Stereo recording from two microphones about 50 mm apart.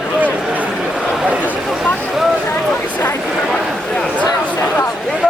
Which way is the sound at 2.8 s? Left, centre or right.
Left.